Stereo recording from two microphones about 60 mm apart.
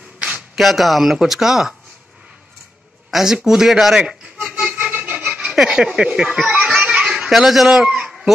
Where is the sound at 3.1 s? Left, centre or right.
Centre.